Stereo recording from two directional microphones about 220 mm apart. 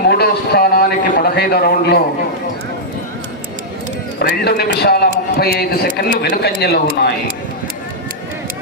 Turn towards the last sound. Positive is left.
turn(degrees=45)  # may be behind; listen again after turning